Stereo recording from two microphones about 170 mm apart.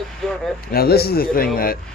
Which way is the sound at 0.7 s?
65° left (ahead or behind).